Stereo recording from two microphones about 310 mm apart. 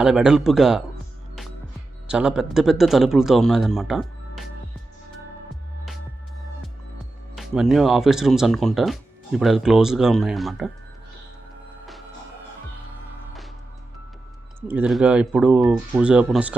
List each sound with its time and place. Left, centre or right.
0.0 s speech: centre
2.0 s speech: centre
7.3 s speech: centre
14.7 s speech: centre